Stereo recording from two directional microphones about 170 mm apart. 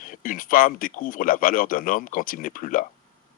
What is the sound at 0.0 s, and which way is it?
Speech, 55° left (ahead or behind).